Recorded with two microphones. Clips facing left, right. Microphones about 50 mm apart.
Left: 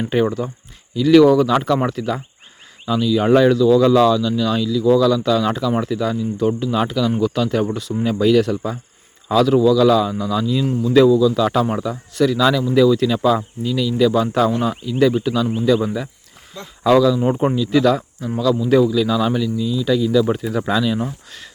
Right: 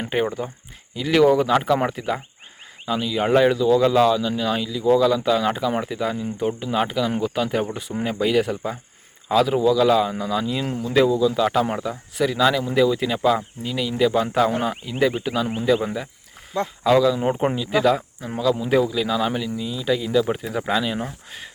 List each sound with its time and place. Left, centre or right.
0.3 s speech: centre
17.5 s speech: right